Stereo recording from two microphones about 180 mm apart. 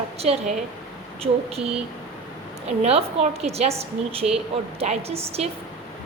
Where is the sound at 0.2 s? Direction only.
35° right (ahead or behind).